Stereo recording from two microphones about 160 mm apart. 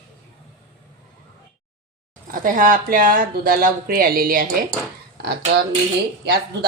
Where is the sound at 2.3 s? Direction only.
55° right (ahead or behind).